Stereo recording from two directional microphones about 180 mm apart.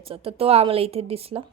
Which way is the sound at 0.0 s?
30° right (ahead or behind).